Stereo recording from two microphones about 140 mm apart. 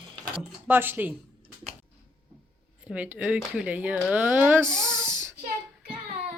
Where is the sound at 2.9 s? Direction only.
10° right (ahead or behind).